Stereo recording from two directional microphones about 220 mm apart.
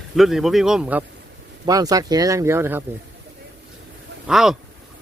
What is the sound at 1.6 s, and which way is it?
Speech, 15° right (ahead or behind).